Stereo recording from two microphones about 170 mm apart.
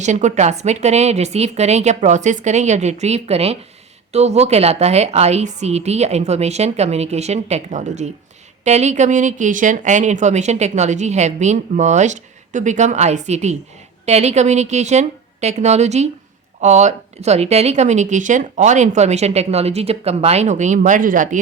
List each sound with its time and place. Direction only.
0.0 s a woman's voice: 45° right (ahead or behind)